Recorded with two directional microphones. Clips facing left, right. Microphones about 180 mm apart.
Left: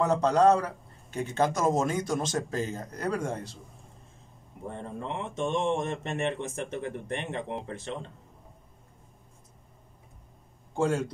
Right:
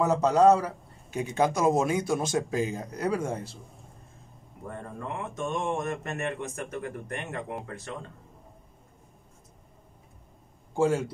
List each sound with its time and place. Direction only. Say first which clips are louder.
0.0 s a man's voice: right 1 dB; 5° right (ahead or behind)
4.6 s speech: left 1 dB; 25° left (ahead or behind)
10.8 s a man's voice: right 2 dB; 10° right (ahead or behind)